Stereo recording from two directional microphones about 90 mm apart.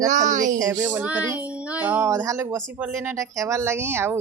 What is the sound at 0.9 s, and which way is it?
Child singing, 15° right (ahead or behind).